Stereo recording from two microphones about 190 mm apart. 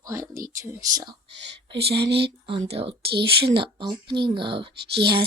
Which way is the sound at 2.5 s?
25° right (ahead or behind).